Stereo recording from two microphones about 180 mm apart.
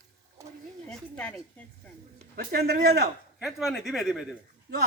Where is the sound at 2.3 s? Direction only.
55° right (ahead or behind).